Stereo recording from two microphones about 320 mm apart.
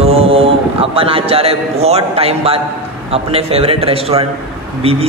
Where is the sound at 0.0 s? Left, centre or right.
Centre.